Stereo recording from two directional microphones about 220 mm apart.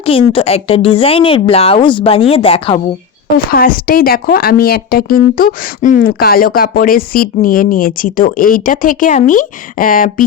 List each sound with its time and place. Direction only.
0.0 s speech: 25° left (ahead or behind)
3.3 s speech: 40° left (ahead or behind)